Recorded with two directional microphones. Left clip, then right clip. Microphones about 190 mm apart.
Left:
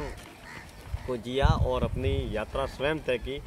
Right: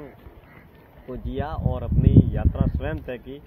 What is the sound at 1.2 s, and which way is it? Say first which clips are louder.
Speech: left 3 dB; 10° left (ahead or behind).